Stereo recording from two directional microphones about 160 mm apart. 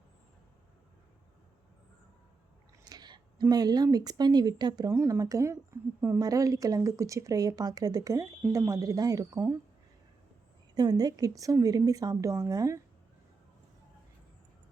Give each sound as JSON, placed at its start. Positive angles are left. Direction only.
{"t": 2.8, "sound": "a sound", "side_deg": -25}
{"t": 3.4, "sound": "speech", "side_deg": -25}
{"t": 10.8, "sound": "speech", "side_deg": -25}